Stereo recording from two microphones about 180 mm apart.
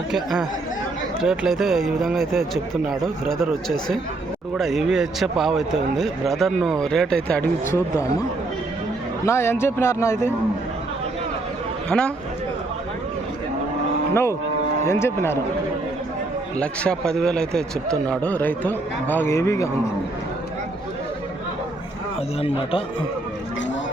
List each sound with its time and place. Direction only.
0.1 s a man's voice: 5° right (ahead or behind)
3.4 s a man's voice: centre (ahead or behind)
9.2 s a man's voice: 15° left (ahead or behind)
11.9 s a man's voice: 5° left (ahead or behind)
14.1 s cattle: 15° left (ahead or behind)
14.8 s a man's voice: 15° left (ahead or behind)
16.6 s a man's voice: 5° left (ahead or behind)
22.4 s speech: 30° left (ahead or behind)